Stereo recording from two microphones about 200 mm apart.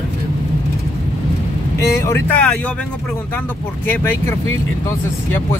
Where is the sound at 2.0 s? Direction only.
10° left (ahead or behind).